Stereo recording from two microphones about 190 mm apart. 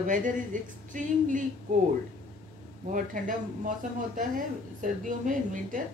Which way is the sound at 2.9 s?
45° right (ahead or behind).